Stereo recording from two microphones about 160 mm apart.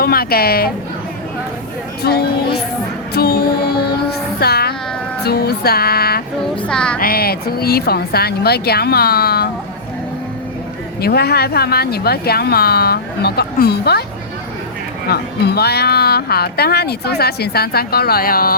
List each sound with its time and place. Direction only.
0.0 s a woman's voice: 70° left (ahead or behind)
2.0 s speech: 80° left
3.2 s music: 75° left (ahead or behind)
5.2 s a woman's voice: 80° left
6.6 s music: 5° left (ahead or behind)
7.0 s a woman's voice: 70° left (ahead or behind)
11.0 s speech: 80° left
15.1 s speech: 85° left; by 18.5 s 65° left (ahead or behind)